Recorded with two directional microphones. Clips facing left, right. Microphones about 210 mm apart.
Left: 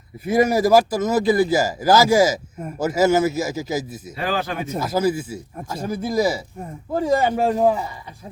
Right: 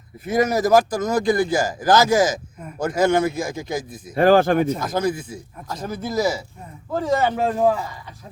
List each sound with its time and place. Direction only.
0.3 s speech: 10° left (ahead or behind)
4.1 s speech: 50° right (ahead or behind)
4.8 s speech: 5° left (ahead or behind)